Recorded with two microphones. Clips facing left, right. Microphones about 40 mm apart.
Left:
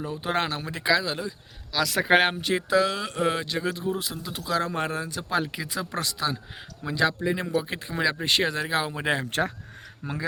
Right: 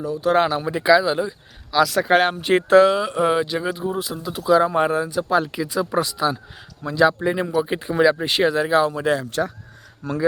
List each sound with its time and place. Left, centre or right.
0.0 s speech: left
0.3 s speech: centre
1.9 s speech: centre
2.6 s speech: right
2.9 s speech: centre
3.9 s speech: centre
7.6 s speech: centre
8.8 s speech: centre
9.2 s speech: left
10.0 s speech: centre